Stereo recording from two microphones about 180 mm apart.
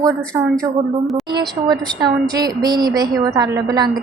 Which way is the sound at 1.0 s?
Centre (ahead or behind).